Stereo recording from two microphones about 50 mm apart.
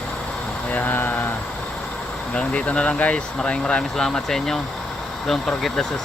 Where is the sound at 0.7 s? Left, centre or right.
Left.